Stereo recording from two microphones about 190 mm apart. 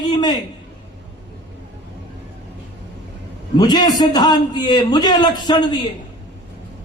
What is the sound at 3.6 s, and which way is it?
Speech, 20° left (ahead or behind).